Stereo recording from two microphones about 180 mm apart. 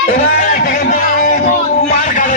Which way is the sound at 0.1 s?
50° left (ahead or behind).